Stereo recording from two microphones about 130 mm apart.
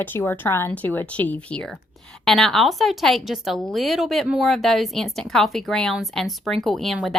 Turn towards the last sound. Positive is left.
turn(degrees=0)  # may be behind; listen again after turning